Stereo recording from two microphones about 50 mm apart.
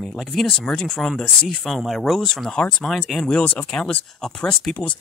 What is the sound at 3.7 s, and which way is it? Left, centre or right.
Speech, centre.